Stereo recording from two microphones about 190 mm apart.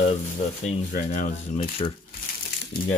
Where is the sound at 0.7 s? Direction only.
40° left (ahead or behind).